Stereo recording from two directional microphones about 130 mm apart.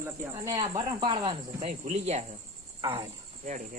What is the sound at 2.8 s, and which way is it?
Speech, 40° right (ahead or behind).